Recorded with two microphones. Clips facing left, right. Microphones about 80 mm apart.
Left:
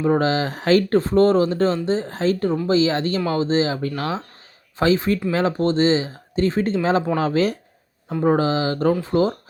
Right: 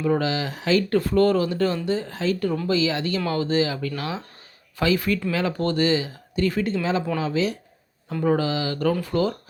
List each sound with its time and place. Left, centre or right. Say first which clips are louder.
0.0 s speech: left 4 dB; left
0.9 s speech: left 2 dB; left
8.2 s speech: left 4 dB; left